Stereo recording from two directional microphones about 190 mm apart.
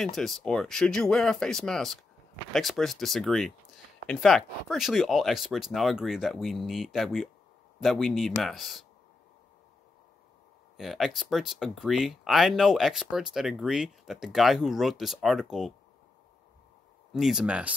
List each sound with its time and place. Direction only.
0.0 s speech: centre (ahead or behind)
10.8 s speech: centre (ahead or behind)
17.1 s speech: 5° right (ahead or behind)